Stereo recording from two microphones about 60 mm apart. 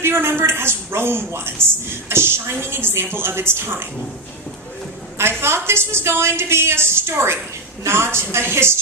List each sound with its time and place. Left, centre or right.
0.0 s a woman's voice: right
5.1 s a woman's voice: right